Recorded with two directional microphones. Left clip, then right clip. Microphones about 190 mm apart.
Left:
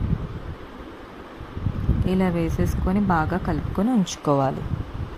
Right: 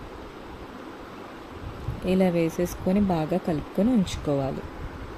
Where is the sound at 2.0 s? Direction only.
40° left (ahead or behind).